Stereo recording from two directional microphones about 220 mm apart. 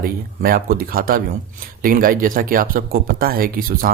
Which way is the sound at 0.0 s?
40° right (ahead or behind).